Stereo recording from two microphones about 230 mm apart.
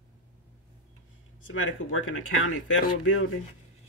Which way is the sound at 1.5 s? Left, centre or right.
Left.